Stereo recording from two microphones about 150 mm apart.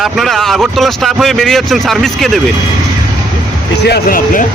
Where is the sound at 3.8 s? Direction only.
80° left.